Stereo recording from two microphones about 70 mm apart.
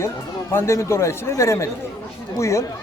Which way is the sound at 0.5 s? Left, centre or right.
Left.